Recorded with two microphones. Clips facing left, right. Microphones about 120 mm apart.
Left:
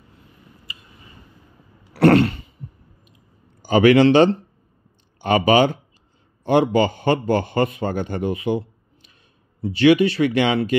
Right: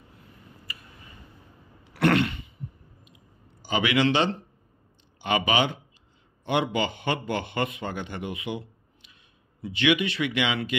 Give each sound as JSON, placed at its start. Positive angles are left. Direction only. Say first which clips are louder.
{"t": 0.7, "sound": "tick", "louder": "left 1 dB", "side_deg": 20}
{"t": 2.0, "sound": "throat clearing", "louder": "left 8 dB", "side_deg": 40}
{"t": 3.6, "sound": "a man's voice", "louder": "left 11 dB", "side_deg": 45}